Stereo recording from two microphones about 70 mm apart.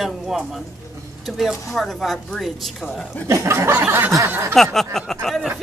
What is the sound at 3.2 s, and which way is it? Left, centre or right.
Speech, right.